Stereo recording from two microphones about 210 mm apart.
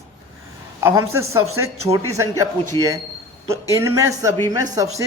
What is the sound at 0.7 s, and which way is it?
A man's voice, 10° right (ahead or behind).